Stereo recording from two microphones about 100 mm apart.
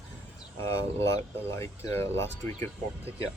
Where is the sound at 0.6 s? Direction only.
30° left (ahead or behind).